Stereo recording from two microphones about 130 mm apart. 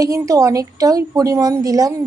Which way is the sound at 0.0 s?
25° right (ahead or behind).